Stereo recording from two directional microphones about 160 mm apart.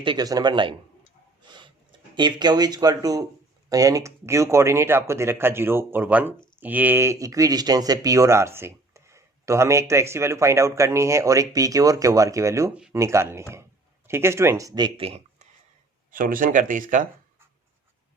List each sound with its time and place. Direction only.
0.0 s speech: 30° right (ahead or behind)
1.4 s a sound: 30° right (ahead or behind)
3.7 s speech: 20° right (ahead or behind); by 15.4 s 35° right (ahead or behind)
16.1 s speech: 60° right (ahead or behind)